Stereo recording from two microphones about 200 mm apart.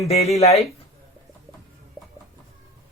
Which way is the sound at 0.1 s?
30° left (ahead or behind).